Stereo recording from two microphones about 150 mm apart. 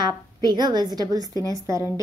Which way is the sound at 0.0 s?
30° right (ahead or behind).